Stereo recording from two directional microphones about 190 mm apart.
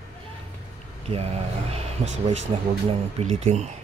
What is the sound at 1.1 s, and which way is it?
Speech, 30° right (ahead or behind).